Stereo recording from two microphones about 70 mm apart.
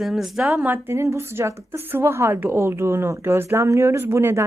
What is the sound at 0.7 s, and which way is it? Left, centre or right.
Speech, right.